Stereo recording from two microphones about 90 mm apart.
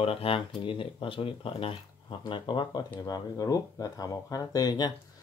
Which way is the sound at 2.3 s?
60° left (ahead or behind).